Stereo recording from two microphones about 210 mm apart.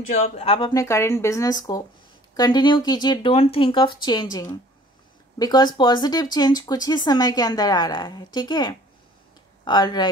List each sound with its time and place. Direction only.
0.4 s a woman's voice: 25° left (ahead or behind)